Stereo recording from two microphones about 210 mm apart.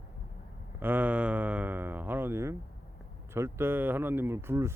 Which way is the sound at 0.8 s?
10° right (ahead or behind).